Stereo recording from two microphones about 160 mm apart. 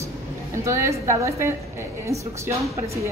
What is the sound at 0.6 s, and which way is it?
Speech, 20° right (ahead or behind).